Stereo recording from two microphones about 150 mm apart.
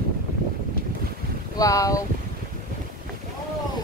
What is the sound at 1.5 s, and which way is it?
Speech, 20° left (ahead or behind).